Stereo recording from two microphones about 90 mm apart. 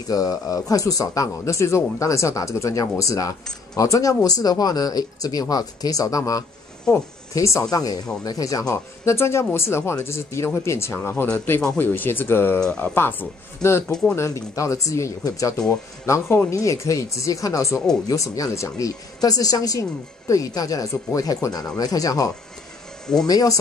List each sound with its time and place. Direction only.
0.1 s speech: 40° left (ahead or behind)
9.0 s speech: 30° left (ahead or behind)
12.5 s speech: 10° left (ahead or behind)
12.9 s speech: 25° left (ahead or behind); by 23.6 s 45° left (ahead or behind)